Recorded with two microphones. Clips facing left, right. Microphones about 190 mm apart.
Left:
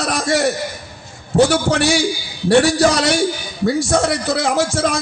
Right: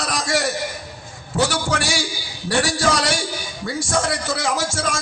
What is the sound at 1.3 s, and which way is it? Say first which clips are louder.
Speech: left 8 dB; 40° left (ahead or behind).